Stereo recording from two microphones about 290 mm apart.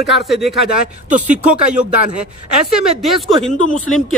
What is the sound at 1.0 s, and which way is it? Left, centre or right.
Speech, right.